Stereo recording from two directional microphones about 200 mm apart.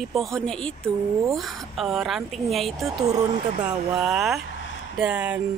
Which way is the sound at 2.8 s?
20° right (ahead or behind).